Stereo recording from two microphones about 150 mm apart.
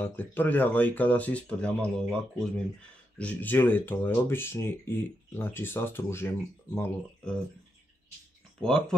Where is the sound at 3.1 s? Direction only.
10° left (ahead or behind).